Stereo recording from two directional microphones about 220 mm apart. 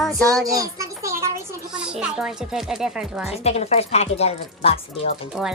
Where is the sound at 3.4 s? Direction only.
30° left (ahead or behind).